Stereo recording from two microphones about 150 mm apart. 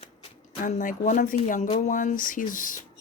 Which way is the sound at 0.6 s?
55° left (ahead or behind).